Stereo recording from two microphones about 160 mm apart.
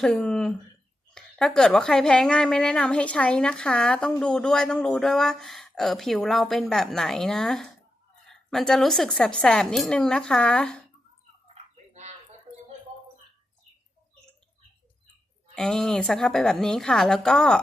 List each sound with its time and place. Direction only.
0.0 s a woman's voice: 5° left (ahead or behind)
15.5 s a woman's voice: 5° left (ahead or behind)